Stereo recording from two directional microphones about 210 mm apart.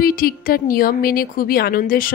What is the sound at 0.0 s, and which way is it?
A woman's voice, 45° left (ahead or behind).